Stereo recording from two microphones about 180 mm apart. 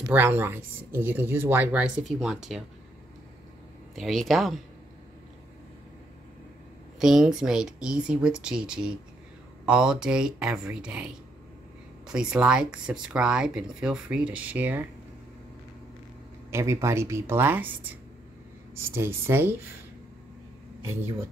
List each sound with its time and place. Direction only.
0.1 s speech: 10° right (ahead or behind)
3.9 s speech: centre (ahead or behind)
7.0 s speech: centre (ahead or behind)
12.1 s speech: 5° right (ahead or behind)
16.4 s speech: 15° right (ahead or behind)
18.9 s speech: 15° right (ahead or behind)
20.8 s speech: 15° right (ahead or behind)